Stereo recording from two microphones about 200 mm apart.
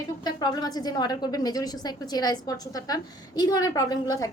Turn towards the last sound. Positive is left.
turn(degrees=20)  # may be behind; listen again after turning